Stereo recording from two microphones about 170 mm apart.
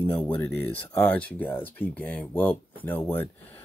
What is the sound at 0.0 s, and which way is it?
Speech, 10° left (ahead or behind).